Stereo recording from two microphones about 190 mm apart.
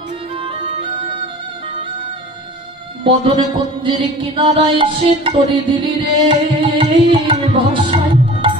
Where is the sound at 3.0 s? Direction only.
25° right (ahead or behind).